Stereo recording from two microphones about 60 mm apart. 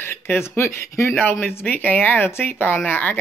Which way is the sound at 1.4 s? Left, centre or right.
Left.